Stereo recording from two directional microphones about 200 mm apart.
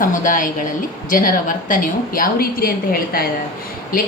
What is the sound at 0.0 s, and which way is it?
A woman's voice, 40° left (ahead or behind).